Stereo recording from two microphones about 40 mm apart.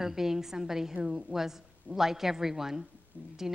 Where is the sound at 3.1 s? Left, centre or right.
Right.